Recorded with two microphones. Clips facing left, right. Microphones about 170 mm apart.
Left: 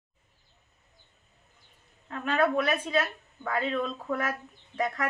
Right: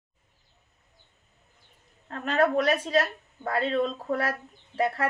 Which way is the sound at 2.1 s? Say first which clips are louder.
Right 2 dB; 40° right (ahead or behind).